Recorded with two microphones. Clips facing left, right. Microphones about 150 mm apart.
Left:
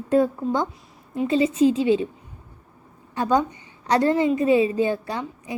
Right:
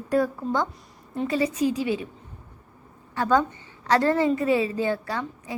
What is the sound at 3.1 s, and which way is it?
A woman's voice, 15° left (ahead or behind).